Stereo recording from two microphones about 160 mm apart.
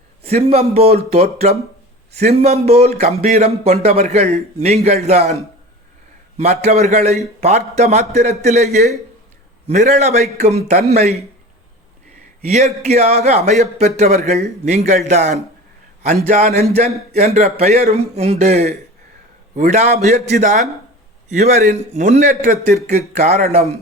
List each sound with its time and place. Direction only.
0.2 s a man's voice: 40° right (ahead or behind)
12.5 s a man's voice: 45° right (ahead or behind)